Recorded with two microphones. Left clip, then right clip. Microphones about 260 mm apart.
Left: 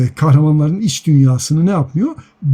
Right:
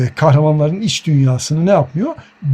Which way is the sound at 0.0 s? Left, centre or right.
Centre.